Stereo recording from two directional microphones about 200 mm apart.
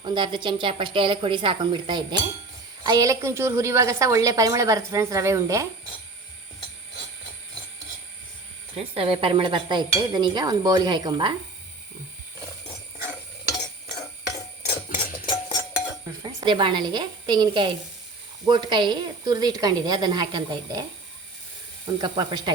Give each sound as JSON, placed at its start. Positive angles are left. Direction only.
{"t": 0.0, "sound": "dishes", "side_deg": -25}
{"t": 2.8, "sound": "a woman's voice", "side_deg": -20}
{"t": 9.0, "sound": "dishes", "side_deg": -25}
{"t": 14.6, "sound": "a sound", "side_deg": 45}
{"t": 15.3, "sound": "music", "side_deg": 25}
{"t": 16.4, "sound": "dishes", "side_deg": -25}
{"t": 22.0, "sound": "dishes", "side_deg": -20}